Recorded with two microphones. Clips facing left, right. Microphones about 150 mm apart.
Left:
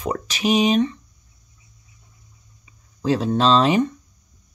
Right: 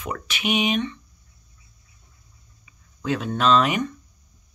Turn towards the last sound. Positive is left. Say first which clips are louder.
# left 3 dB
turn(degrees=30)  # may be behind; listen again after turning